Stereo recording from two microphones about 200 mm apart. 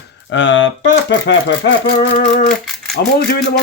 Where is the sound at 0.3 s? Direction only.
65° left (ahead or behind); by 2.6 s 50° left (ahead or behind).